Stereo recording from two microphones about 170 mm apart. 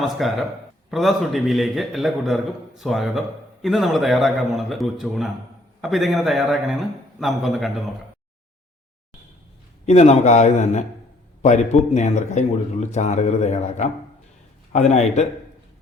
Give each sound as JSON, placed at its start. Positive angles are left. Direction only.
{"t": 0.0, "sound": "a man's voice", "side_deg": 0}
{"t": 9.8, "sound": "a man's voice", "side_deg": 40}